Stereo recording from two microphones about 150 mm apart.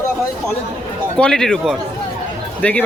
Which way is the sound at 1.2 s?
5° left (ahead or behind).